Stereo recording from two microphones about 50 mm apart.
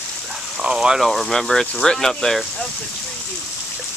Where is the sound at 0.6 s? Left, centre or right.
Centre.